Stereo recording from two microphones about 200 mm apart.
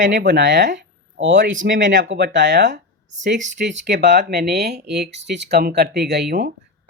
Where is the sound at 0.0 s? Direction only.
60° right (ahead or behind).